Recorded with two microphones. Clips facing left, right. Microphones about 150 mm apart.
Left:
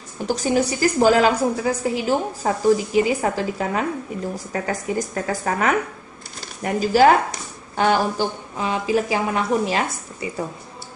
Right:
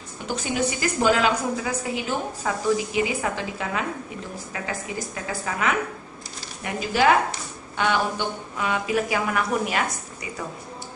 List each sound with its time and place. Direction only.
0.3 s a woman's voice: 40° left (ahead or behind)